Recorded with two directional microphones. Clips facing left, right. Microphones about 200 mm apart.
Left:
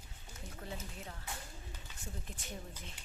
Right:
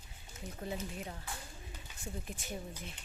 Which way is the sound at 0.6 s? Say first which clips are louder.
Right 6 dB; 20° right (ahead or behind).